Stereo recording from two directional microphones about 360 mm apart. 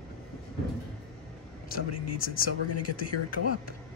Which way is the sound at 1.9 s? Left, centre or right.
Left.